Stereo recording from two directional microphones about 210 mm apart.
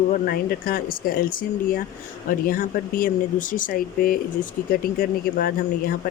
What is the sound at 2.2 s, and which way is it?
Speech, 40° left (ahead or behind).